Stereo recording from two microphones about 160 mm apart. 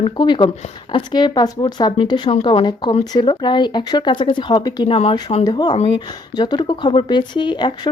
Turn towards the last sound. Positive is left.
turn(degrees=25)  # may be behind; listen again after turning